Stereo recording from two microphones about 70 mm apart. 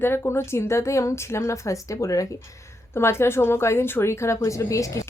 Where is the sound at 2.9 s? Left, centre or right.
Left.